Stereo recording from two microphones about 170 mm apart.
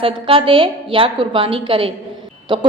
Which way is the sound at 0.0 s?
30° right (ahead or behind).